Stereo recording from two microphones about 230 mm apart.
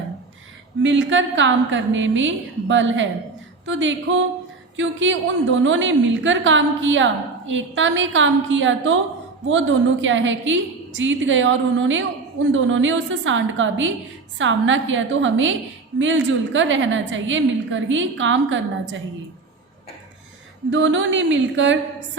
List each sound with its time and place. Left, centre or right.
0.8 s a woman's voice: right
20.7 s a woman's voice: right